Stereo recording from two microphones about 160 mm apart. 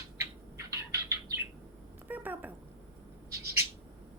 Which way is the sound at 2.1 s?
10° right (ahead or behind).